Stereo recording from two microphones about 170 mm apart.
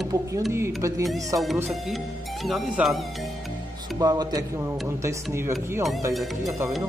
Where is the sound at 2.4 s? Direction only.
Centre (ahead or behind).